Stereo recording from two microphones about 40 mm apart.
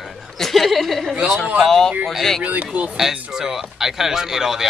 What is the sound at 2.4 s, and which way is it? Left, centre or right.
Speech, right.